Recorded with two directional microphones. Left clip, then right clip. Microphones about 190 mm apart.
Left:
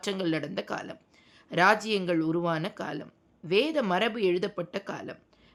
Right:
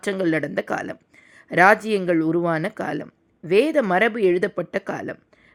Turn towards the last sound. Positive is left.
turn(degrees=-30)  # may be behind; listen again after turning